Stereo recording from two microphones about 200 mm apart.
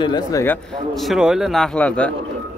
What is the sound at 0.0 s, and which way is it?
Speech, 20° left (ahead or behind).